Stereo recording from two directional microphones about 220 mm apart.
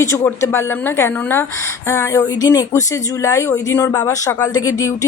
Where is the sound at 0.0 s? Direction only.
10° left (ahead or behind).